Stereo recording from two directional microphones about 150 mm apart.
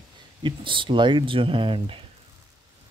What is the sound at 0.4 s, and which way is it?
Speech, 30° right (ahead or behind).